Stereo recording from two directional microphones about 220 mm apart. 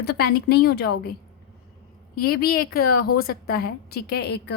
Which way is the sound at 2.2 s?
45° left (ahead or behind).